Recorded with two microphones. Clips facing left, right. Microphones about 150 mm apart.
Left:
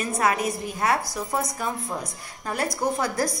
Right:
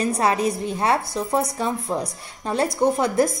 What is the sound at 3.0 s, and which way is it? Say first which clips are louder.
Speech: right 6 dB; 25° right (ahead or behind).